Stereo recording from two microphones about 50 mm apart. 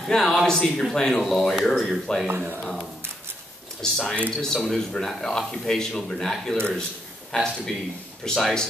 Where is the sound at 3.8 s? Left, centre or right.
Centre.